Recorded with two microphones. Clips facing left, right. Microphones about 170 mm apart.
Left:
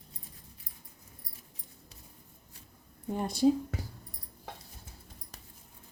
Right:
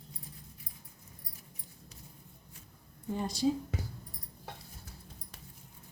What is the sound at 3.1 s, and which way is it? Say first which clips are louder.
Speech: left 5 dB; 55° left (ahead or behind).